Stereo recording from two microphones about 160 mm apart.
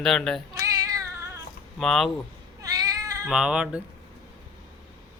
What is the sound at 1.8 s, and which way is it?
Speech, centre (ahead or behind).